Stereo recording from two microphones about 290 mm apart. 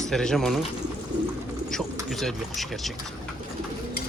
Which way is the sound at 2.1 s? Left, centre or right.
Centre.